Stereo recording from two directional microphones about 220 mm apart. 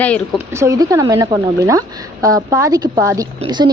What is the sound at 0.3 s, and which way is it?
Speech, 15° right (ahead or behind).